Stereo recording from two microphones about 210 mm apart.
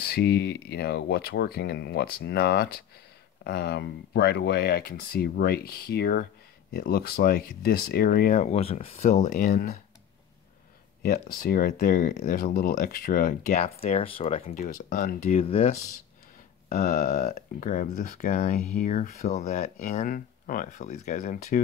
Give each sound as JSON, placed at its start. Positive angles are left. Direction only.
{"t": 0.0, "sound": "speech", "side_deg": 50}
{"t": 8.4, "sound": "speech", "side_deg": 30}
{"t": 11.0, "sound": "speech", "side_deg": 45}
{"t": 13.9, "sound": "speech", "side_deg": 25}
{"t": 15.4, "sound": "speech", "side_deg": 30}
{"t": 16.8, "sound": "speech", "side_deg": 45}